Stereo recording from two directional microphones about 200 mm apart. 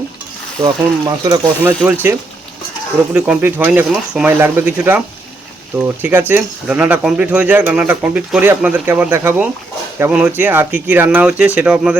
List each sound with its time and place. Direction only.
0.6 s speech: 20° right (ahead or behind)